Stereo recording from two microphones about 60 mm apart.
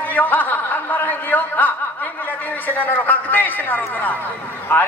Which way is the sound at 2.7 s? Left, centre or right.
Left.